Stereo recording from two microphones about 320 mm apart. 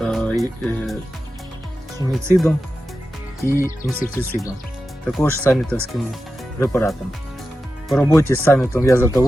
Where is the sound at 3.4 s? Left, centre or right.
Centre.